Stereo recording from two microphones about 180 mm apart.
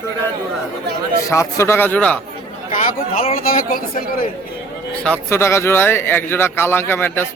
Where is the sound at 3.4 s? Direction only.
50° left (ahead or behind).